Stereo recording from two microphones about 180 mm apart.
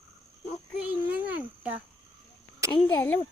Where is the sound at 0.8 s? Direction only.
10° right (ahead or behind).